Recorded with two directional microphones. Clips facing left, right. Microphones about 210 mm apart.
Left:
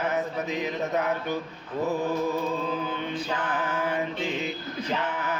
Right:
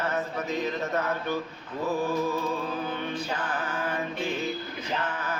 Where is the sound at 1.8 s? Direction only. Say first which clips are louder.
Even; 20° left (ahead or behind).